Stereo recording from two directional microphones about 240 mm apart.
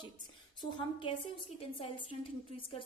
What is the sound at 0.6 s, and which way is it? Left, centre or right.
A woman's voice, centre.